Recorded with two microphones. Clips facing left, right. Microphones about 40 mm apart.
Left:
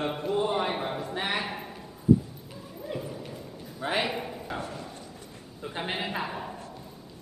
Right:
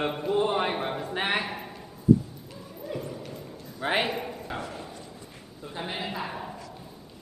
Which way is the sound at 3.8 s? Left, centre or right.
Right.